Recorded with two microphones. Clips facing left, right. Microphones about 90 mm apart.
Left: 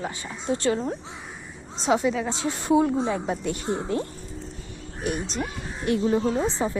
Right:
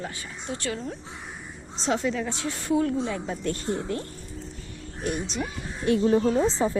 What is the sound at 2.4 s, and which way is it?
A woman's voice, 20° left (ahead or behind).